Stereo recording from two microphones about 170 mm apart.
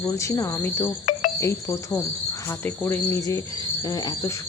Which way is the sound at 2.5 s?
10° left (ahead or behind).